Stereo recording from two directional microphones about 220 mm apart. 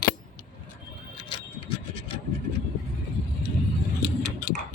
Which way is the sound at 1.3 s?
25° left (ahead or behind).